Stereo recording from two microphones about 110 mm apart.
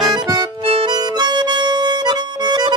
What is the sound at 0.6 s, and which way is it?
Music, 60° right (ahead or behind).